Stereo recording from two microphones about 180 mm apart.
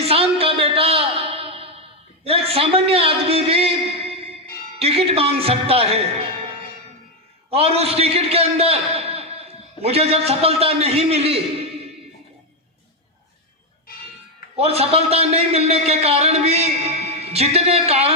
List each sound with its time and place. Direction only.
0.0 s a sound: 35° right (ahead or behind)
4.8 s a man's voice: 35° right (ahead or behind)
7.5 s a man's voice: 35° right (ahead or behind)
14.5 s a man's voice: 35° right (ahead or behind)